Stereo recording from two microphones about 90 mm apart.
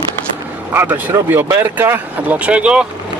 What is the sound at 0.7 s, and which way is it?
Speech, 20° right (ahead or behind).